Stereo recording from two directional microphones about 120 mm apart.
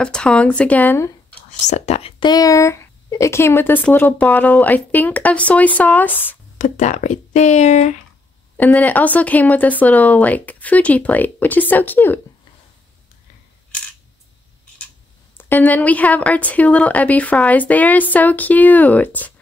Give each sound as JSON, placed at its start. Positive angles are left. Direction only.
{"t": 0.0, "sound": "speech", "side_deg": 5}
{"t": 1.7, "sound": "speech", "side_deg": 60}
{"t": 2.2, "sound": "speech", "side_deg": 30}
{"t": 6.6, "sound": "speech", "side_deg": 90}
{"t": 8.5, "sound": "speech", "side_deg": 15}
{"t": 15.3, "sound": "speech", "side_deg": 15}